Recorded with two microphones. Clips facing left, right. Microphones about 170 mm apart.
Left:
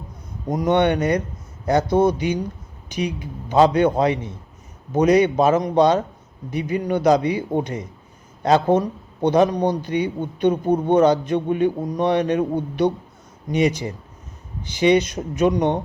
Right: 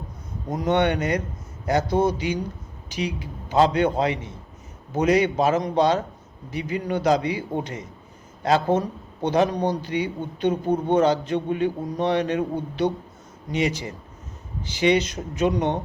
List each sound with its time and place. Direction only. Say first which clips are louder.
0.4 s a man's voice: left 3 dB; 15° left (ahead or behind)